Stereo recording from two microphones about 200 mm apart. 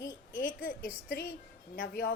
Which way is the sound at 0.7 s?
45° left (ahead or behind).